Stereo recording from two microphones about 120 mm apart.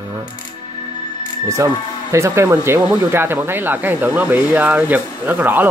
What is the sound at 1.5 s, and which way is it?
Speech, 25° right (ahead or behind).